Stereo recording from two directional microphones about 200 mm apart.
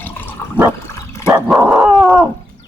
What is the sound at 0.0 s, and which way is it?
Water, 10° left (ahead or behind).